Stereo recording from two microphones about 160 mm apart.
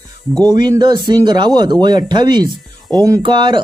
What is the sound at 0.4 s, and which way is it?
Speech, 25° right (ahead or behind).